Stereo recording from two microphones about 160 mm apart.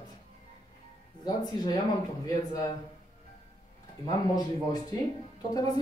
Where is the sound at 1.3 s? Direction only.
25° left (ahead or behind).